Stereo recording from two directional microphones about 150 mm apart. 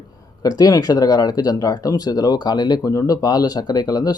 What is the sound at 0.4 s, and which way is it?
Speech, 25° left (ahead or behind).